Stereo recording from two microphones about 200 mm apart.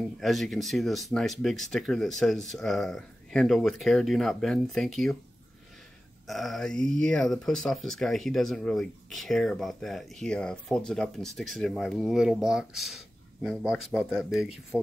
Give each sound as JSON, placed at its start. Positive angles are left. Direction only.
{"t": 0.2, "sound": "speech", "side_deg": 0}
{"t": 6.2, "sound": "speech", "side_deg": 0}